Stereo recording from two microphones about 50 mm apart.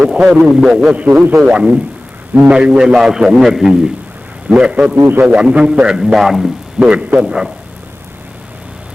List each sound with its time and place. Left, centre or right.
0.0 s a man's voice: centre
0.4 s a man's voice: centre
0.8 s a man's voice: centre
4.9 s a man's voice: right
5.2 s a man's voice: right; by 6.5 s centre
6.7 s a man's voice: right